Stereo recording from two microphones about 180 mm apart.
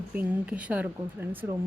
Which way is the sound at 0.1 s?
10° right (ahead or behind).